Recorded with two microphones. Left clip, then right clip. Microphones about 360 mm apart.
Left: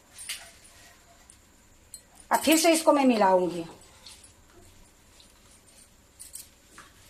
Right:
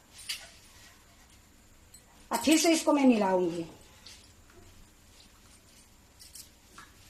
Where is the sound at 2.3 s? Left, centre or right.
Left.